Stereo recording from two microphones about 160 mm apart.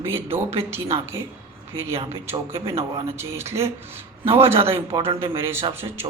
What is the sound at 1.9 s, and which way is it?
A man's voice, 35° right (ahead or behind).